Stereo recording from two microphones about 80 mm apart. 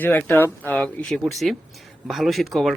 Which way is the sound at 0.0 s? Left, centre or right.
Left.